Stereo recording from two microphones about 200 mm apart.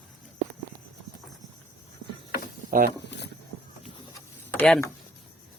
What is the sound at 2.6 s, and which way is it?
Speech, 45° right (ahead or behind).